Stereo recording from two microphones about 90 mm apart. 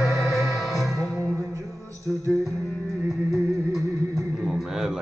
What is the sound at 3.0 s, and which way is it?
Music, 5° right (ahead or behind).